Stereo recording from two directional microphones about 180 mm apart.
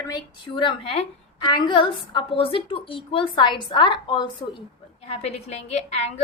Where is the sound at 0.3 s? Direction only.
25° left (ahead or behind).